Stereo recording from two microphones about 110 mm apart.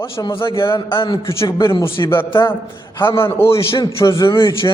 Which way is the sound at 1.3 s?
25° left (ahead or behind).